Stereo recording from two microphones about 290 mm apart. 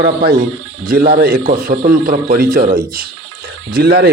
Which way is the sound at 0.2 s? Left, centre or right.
Right.